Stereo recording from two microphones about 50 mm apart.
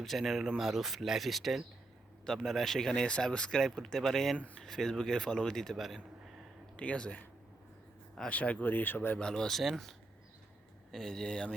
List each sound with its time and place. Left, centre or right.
0.0 s speech: centre
6.7 s speech: left
8.3 s speech: left
8.6 s speech: left
9.1 s speech: centre
9.5 s speech: centre
10.9 s speech: centre